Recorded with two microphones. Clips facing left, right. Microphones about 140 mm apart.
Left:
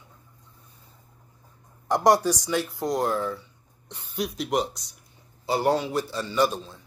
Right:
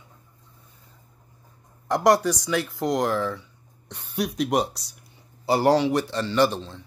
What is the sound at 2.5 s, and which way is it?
Speech, 90° right.